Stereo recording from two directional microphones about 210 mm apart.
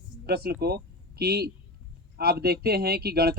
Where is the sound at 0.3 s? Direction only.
50° right (ahead or behind).